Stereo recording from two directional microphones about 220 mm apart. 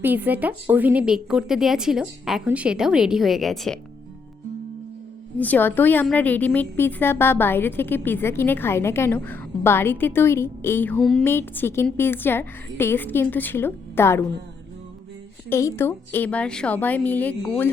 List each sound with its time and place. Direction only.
0.0 s a woman's voice: 10° right (ahead or behind)
5.4 s a woman's voice: 10° left (ahead or behind)
15.4 s a woman's voice: 10° left (ahead or behind)